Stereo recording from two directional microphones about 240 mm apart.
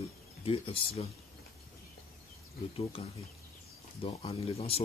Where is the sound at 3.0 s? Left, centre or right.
Left.